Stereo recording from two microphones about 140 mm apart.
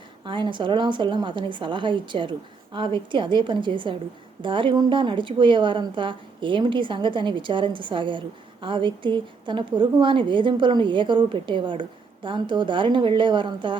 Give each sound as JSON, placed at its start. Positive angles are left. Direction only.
{"t": 0.3, "sound": "a woman's voice", "side_deg": -35}